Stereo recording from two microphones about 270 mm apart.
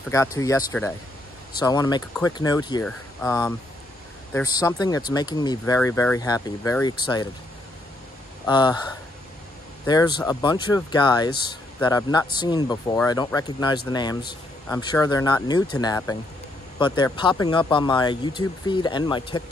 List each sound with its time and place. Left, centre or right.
0.1 s speech: centre
8.5 s speech: centre